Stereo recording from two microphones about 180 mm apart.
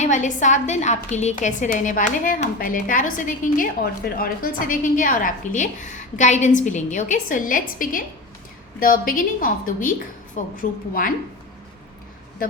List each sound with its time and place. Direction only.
0.0 s a woman's voice: 45° left (ahead or behind)